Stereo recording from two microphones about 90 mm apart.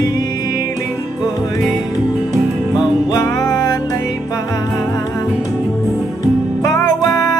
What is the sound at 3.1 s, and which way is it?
Music, 40° left (ahead or behind).